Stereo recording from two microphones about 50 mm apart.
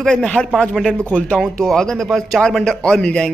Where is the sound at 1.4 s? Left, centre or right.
Centre.